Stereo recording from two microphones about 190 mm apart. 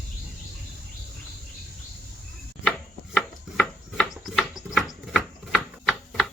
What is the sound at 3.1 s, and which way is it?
Rub, 5° left (ahead or behind).